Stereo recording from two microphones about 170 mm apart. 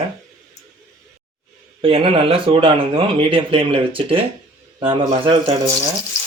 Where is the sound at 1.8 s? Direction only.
30° right (ahead or behind).